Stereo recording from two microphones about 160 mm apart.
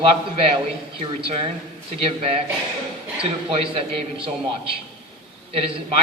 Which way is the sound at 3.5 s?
40° right (ahead or behind).